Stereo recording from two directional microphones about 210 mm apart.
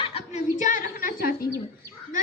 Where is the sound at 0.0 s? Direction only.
30° left (ahead or behind).